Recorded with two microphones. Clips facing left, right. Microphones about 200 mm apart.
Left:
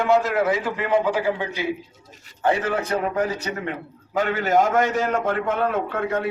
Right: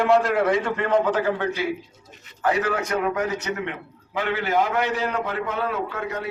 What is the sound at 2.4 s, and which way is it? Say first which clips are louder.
A man's voice: left 1 dB; 30° left (ahead or behind).